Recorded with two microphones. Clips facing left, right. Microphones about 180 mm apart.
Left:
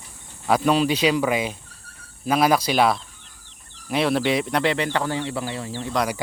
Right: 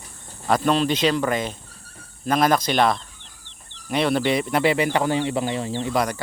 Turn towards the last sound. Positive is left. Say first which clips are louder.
# right 4 dB
turn(degrees=-20)  # may be behind; listen again after turning